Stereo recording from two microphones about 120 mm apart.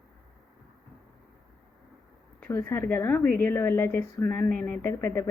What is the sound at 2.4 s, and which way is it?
A woman's voice, 20° left (ahead or behind).